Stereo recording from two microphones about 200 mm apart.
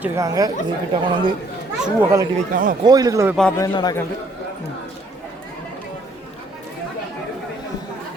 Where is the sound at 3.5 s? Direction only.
20° left (ahead or behind).